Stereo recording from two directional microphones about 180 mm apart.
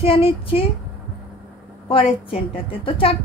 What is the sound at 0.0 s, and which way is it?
Speech, 30° left (ahead or behind).